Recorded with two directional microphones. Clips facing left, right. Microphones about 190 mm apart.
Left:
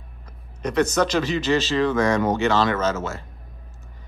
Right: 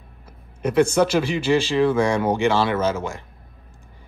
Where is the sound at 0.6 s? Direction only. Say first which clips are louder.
Right 3 dB; 10° right (ahead or behind).